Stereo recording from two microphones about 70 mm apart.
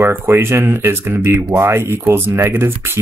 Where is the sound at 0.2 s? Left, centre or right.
Right.